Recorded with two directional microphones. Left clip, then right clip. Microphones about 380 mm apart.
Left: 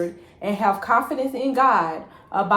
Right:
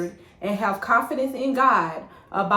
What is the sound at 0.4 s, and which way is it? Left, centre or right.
A woman's voice, centre.